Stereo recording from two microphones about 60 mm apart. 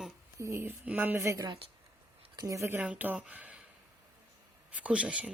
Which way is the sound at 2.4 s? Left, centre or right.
Right.